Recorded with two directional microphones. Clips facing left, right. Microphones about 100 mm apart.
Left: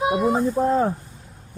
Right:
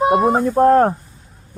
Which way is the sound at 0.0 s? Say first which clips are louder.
Right 6 dB; 50° right (ahead or behind).